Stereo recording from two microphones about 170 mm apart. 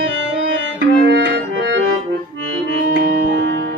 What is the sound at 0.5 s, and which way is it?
Music, 90° right.